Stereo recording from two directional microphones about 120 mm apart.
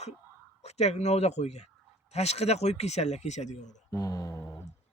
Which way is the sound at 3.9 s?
30° left (ahead or behind).